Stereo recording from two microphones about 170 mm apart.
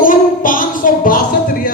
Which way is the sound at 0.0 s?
55° left (ahead or behind).